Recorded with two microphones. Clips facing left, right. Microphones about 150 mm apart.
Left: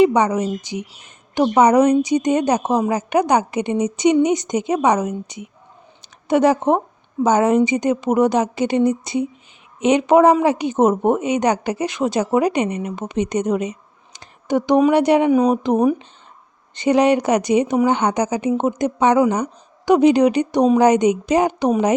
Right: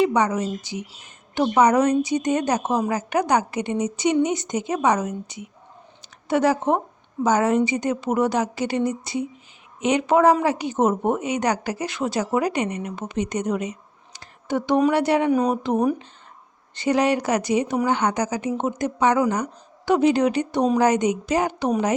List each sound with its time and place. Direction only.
0.0 s a woman's voice: 20° left (ahead or behind)